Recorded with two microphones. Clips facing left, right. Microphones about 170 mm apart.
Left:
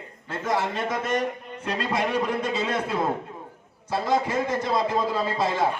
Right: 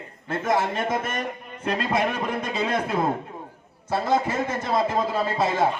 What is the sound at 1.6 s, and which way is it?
Speech, 50° right (ahead or behind).